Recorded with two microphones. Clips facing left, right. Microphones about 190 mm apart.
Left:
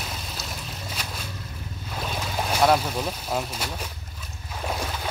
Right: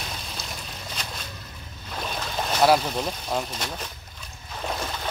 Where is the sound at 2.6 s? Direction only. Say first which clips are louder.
Right 1 dB; centre (ahead or behind).